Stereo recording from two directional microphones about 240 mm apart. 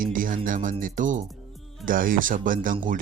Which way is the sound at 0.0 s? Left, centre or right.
Right.